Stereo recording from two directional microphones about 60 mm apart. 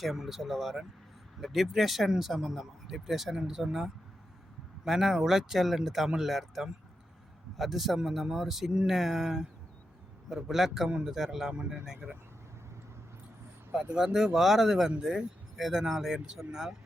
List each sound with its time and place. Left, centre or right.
0.0 s a man's voice: centre
10.8 s speech: centre
11.1 s speech: centre
13.7 s speech: centre